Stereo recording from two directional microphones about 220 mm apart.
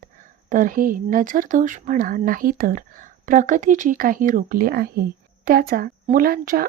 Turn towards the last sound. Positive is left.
turn(degrees=-40)  # may be behind; listen again after turning